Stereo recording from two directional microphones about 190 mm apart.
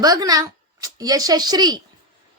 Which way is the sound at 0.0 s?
20° right (ahead or behind).